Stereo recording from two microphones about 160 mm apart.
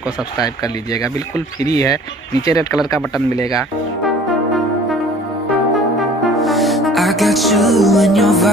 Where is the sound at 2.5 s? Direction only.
20° left (ahead or behind).